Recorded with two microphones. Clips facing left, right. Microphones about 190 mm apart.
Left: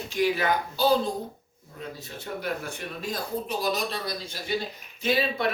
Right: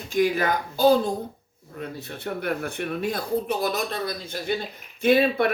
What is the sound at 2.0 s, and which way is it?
Speech, 60° right (ahead or behind).